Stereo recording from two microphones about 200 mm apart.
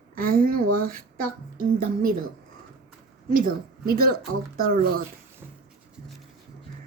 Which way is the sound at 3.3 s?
45° right (ahead or behind).